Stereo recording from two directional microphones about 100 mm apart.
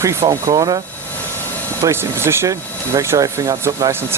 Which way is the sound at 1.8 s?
25° right (ahead or behind).